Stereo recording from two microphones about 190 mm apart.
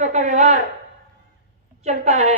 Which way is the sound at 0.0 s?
40° right (ahead or behind).